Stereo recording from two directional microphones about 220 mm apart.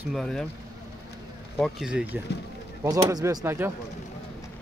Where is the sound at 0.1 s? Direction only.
Centre (ahead or behind).